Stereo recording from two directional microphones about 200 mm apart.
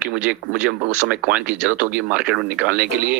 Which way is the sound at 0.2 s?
5° right (ahead or behind).